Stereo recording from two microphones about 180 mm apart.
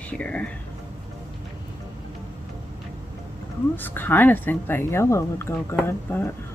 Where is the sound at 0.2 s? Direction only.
5° left (ahead or behind).